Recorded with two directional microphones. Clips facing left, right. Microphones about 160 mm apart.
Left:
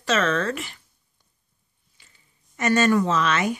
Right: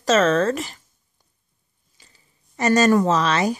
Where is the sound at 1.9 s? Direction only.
35° right (ahead or behind).